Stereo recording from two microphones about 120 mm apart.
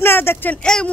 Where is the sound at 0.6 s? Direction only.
5° left (ahead or behind).